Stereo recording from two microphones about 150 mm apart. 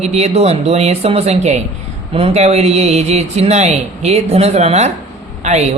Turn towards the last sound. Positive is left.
turn(degrees=-50)  # may be behind; listen again after turning